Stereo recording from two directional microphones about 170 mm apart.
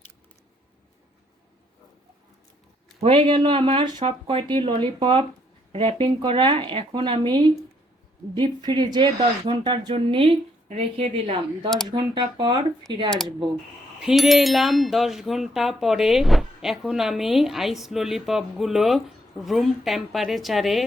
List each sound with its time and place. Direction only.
3.0 s speech: 35° right (ahead or behind)
13.1 s speech: centre (ahead or behind)